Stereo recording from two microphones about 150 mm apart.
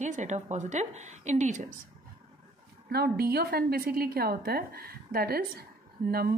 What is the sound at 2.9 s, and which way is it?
A woman's voice, 90° right.